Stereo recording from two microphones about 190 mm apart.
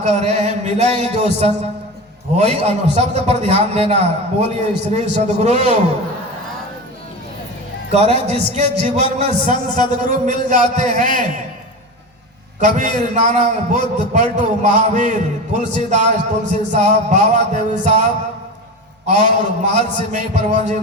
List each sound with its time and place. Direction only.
0.0 s a man's voice: 35° right (ahead or behind)
7.9 s a man's voice: 35° right (ahead or behind)
9.2 s a man's voice: 25° left (ahead or behind)
10.0 s a man's voice: 40° right (ahead or behind)
12.5 s a man's voice: 40° right (ahead or behind)
19.1 s a man's voice: 40° right (ahead or behind)